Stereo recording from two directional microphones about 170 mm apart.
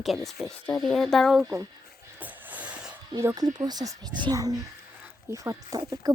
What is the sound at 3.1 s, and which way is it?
Speech, 20° right (ahead or behind).